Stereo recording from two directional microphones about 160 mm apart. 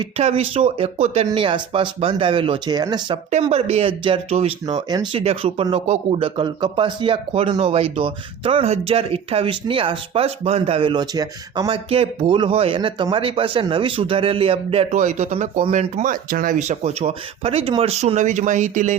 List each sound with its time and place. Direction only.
0.0 s a man's voice: 40° right (ahead or behind)
1.3 s a man's voice: 30° right (ahead or behind)
3.4 s a man's voice: 40° right (ahead or behind)
4.6 s speech: 25° right (ahead or behind)
5.1 s a man's voice: 40° right (ahead or behind)